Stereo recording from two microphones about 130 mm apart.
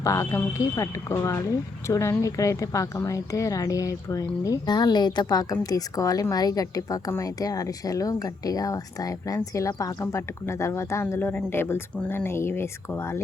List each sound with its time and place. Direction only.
0.0 s speech: 25° left (ahead or behind)